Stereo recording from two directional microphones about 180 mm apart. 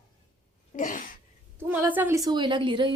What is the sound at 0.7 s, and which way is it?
Sneeze, 45° left (ahead or behind).